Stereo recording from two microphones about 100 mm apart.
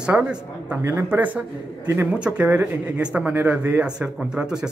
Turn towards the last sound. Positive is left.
turn(degrees=-10)  # may be behind; listen again after turning